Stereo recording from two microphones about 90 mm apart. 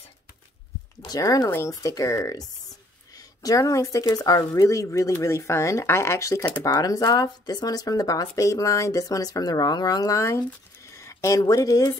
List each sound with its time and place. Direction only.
1.0 s speech: 45° left (ahead or behind)